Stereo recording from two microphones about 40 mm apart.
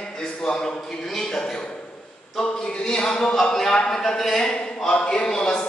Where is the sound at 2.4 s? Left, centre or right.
Left.